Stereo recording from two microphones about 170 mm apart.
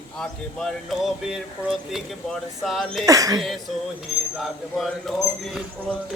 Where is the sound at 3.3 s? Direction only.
Centre (ahead or behind).